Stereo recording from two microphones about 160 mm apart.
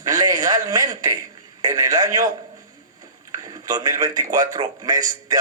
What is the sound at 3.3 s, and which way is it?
A man's voice, 25° right (ahead or behind).